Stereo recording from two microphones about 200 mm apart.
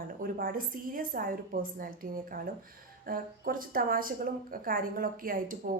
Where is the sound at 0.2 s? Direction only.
45° right (ahead or behind).